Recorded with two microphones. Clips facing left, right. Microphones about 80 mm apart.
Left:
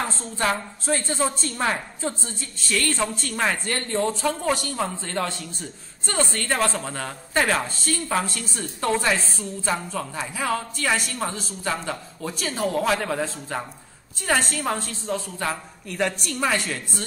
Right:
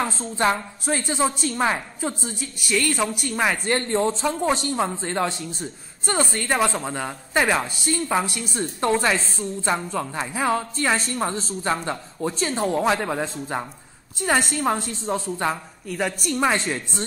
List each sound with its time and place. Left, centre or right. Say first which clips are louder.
0.2 s a woman's voice: right 3 dB; centre
14.5 s a woman's voice: right 3 dB; centre